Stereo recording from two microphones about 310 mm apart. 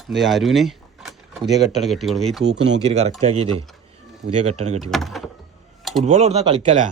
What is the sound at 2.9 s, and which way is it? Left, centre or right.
Speech, centre.